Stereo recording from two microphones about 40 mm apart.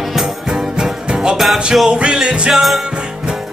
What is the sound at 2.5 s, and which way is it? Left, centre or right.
Speech, centre.